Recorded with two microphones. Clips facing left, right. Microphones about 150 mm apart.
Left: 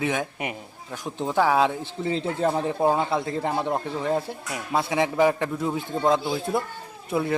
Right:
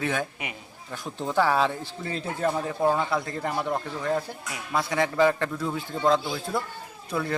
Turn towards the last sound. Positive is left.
turn(degrees=20)  # may be behind; listen again after turning